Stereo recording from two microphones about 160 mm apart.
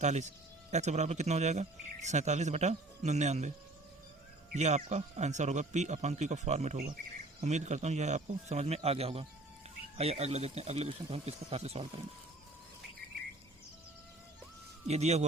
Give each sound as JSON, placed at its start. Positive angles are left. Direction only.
{"t": 0.0, "sound": "speech", "side_deg": -45}
{"t": 4.5, "sound": "speech", "side_deg": -45}
{"t": 14.8, "sound": "speech", "side_deg": -45}